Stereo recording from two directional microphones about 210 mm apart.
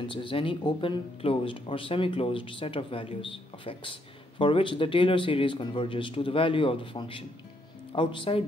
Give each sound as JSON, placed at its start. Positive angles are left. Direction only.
{"t": 0.1, "sound": "speech", "side_deg": 25}